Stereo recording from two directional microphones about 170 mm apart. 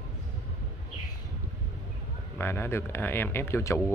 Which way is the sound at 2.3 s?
15° left (ahead or behind).